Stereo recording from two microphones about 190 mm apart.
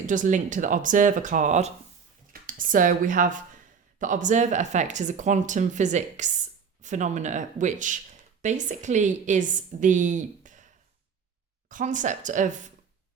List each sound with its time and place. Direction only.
0.0 s speech: 40° right (ahead or behind)
11.7 s speech: 40° right (ahead or behind)